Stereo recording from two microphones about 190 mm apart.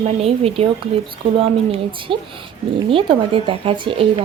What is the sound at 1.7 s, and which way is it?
A woman's voice, 25° right (ahead or behind).